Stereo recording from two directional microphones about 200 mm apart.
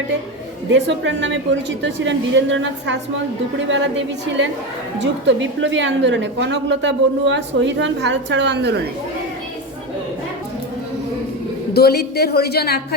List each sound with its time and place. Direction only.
0.7 s a woman's voice: 65° right (ahead or behind)
11.7 s a woman's voice: 55° left (ahead or behind)